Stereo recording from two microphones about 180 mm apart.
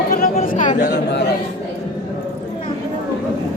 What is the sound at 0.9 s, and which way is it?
Chatter, 70° left (ahead or behind).